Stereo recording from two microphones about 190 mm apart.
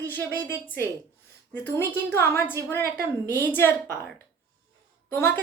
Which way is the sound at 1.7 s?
10° left (ahead or behind).